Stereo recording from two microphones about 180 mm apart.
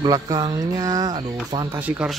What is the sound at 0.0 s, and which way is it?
Speech, 20° right (ahead or behind).